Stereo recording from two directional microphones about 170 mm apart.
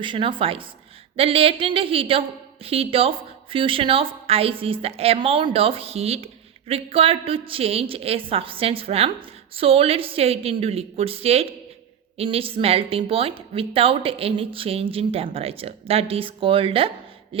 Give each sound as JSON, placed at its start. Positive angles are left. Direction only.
{"t": 0.0, "sound": "a woman's voice", "side_deg": -30}